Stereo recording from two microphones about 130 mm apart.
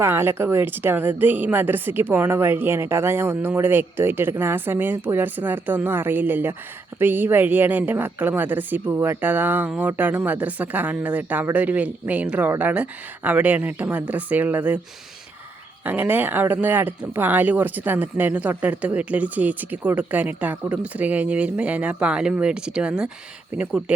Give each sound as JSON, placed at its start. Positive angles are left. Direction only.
{"t": 0.0, "sound": "speech", "side_deg": -20}
{"t": 15.8, "sound": "speech", "side_deg": -15}